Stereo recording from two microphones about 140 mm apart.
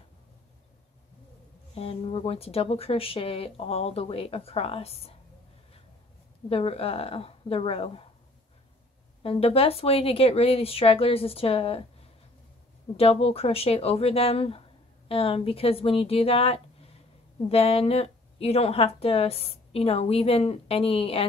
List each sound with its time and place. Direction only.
1.8 s speech: 45° left (ahead or behind)
6.5 s speech: 45° left (ahead or behind)
9.2 s speech: 45° left (ahead or behind)